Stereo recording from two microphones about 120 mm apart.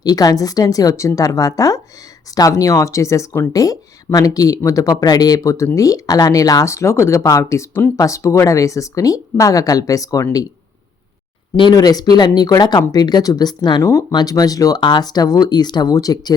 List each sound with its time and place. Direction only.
0.0 s speech: 30° left (ahead or behind)
11.7 s speech: 35° left (ahead or behind)